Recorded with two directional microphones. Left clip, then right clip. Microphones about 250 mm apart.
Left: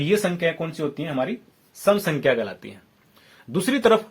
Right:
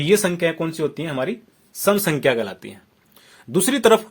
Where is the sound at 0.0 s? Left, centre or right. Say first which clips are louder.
Right 3 dB; right.